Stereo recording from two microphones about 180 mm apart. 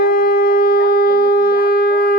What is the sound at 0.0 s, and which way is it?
Shofar, 55° left (ahead or behind).